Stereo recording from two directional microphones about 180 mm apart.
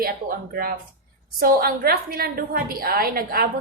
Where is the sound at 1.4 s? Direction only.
55° right (ahead or behind).